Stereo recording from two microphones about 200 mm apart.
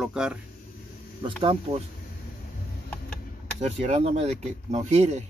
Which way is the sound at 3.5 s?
35° right (ahead or behind).